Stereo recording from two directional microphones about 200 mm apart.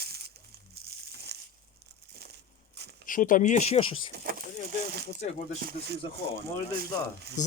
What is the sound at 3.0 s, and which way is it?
Speech, 40° left (ahead or behind).